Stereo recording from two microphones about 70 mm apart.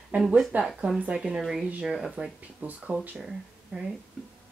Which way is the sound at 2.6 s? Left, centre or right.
Centre.